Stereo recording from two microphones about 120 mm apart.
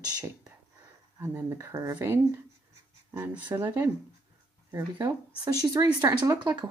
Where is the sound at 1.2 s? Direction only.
20° right (ahead or behind).